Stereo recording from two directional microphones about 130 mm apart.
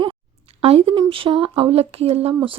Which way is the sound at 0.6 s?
45° right (ahead or behind).